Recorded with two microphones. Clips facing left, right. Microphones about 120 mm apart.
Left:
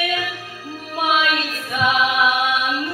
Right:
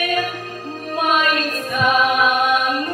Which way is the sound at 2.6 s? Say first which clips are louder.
Right 2 dB; 15° left (ahead or behind).